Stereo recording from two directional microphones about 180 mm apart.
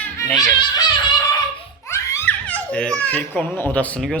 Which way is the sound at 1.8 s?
15° left (ahead or behind).